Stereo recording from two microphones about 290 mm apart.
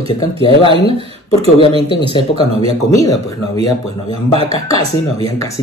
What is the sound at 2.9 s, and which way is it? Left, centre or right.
Speech, centre.